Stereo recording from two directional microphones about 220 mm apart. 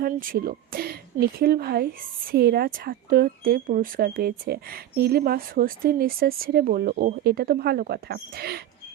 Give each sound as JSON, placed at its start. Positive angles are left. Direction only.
{"t": 0.0, "sound": "a woman's voice", "side_deg": -40}